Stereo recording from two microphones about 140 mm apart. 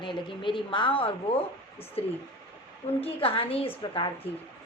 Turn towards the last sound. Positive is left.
turn(degrees=40)  # may be behind; listen again after turning